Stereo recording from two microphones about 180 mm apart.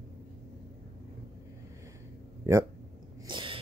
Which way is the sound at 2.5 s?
15° right (ahead or behind).